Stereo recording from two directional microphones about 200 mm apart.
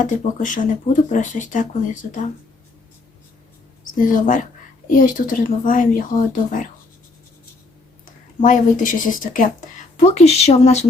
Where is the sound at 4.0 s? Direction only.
40° left (ahead or behind).